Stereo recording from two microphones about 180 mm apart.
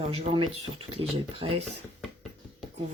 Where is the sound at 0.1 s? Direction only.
30° right (ahead or behind).